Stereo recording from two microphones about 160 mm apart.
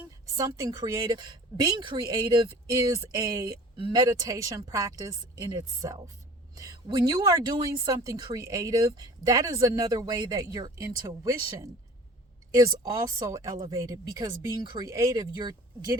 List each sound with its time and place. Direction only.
0.3 s speech: 20° right (ahead or behind)